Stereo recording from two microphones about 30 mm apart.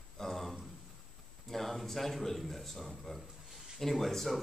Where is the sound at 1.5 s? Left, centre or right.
Centre.